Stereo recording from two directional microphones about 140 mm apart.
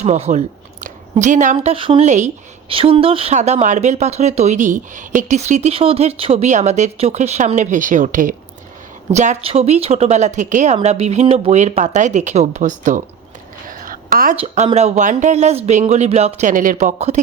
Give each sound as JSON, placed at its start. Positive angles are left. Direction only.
{"t": 0.0, "sound": "speech", "side_deg": -50}
{"t": 1.5, "sound": "speech", "side_deg": -40}
{"t": 2.0, "sound": "speech", "side_deg": -60}
{"t": 2.6, "sound": "speech", "side_deg": -40}
{"t": 3.3, "sound": "speech", "side_deg": -55}
{"t": 9.1, "sound": "a woman's voice", "side_deg": -55}
{"t": 13.7, "sound": "a sound", "side_deg": -75}
{"t": 14.4, "sound": "a woman's voice", "side_deg": -55}